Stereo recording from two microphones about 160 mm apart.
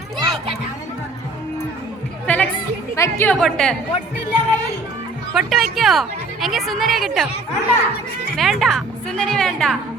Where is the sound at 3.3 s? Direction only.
5° left (ahead or behind).